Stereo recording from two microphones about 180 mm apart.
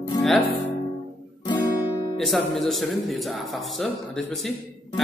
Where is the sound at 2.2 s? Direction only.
Centre (ahead or behind).